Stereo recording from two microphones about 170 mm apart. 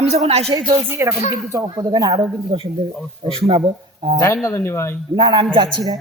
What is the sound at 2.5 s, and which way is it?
A woman's voice, 35° right (ahead or behind).